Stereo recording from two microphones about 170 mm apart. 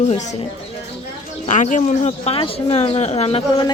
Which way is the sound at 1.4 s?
45° left (ahead or behind).